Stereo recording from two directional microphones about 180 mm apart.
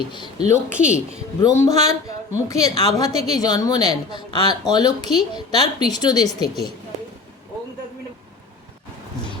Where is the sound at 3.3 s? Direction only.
20° left (ahead or behind).